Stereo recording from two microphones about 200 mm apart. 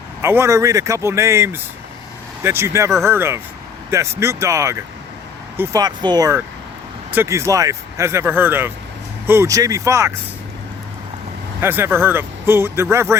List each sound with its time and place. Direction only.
0.2 s speech: 15° right (ahead or behind)
11.6 s speech: 10° right (ahead or behind)